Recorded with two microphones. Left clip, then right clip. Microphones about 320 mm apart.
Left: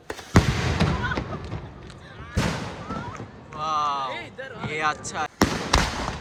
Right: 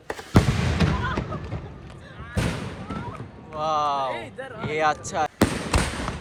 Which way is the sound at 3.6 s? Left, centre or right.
Centre.